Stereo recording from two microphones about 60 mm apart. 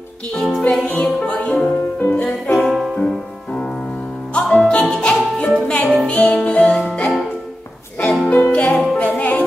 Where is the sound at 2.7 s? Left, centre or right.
Centre.